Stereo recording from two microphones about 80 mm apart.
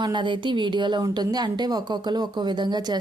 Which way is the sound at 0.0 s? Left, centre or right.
Right.